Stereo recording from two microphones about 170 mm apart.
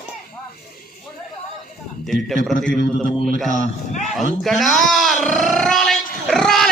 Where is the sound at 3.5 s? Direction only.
45° left (ahead or behind).